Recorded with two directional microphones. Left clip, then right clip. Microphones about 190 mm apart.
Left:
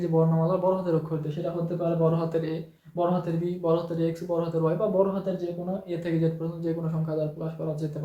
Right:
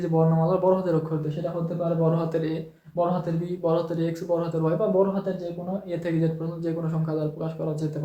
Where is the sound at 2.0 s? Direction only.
15° right (ahead or behind).